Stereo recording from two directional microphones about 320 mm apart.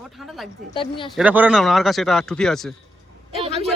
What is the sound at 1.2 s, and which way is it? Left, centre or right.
Speech, centre.